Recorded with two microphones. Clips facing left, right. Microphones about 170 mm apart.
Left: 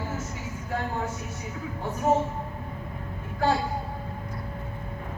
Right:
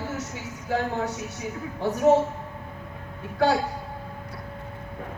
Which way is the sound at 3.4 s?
75° right (ahead or behind).